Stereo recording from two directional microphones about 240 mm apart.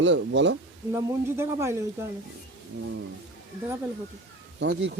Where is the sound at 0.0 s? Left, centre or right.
Right.